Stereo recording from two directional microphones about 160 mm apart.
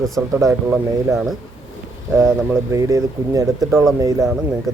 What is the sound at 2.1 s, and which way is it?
Speech, 20° right (ahead or behind).